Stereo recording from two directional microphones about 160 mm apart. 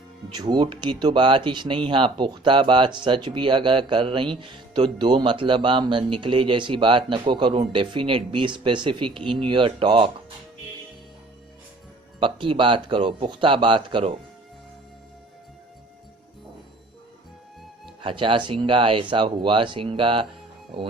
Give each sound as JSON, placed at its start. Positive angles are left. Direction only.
{"t": 0.3, "sound": "speech", "side_deg": -25}
{"t": 12.2, "sound": "speech", "side_deg": -30}
{"t": 18.0, "sound": "speech", "side_deg": -30}